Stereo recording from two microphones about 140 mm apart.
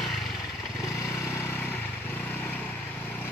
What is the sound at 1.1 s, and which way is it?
Vehicle, 20° left (ahead or behind).